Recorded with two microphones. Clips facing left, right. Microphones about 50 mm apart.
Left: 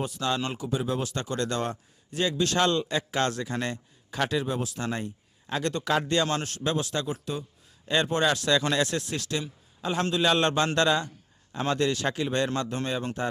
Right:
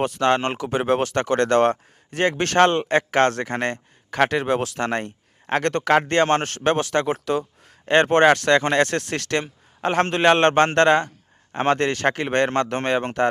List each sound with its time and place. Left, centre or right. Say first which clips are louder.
0.0 s a man's voice: right 9 dB; right